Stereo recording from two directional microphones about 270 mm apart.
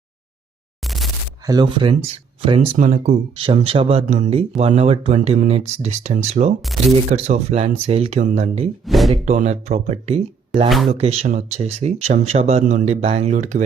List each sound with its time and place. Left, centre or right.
0.9 s a sound: centre
1.5 s speech: centre
8.9 s speech: centre
9.2 s speech: right